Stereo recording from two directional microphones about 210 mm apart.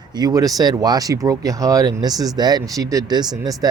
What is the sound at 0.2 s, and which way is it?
Speech, 15° right (ahead or behind).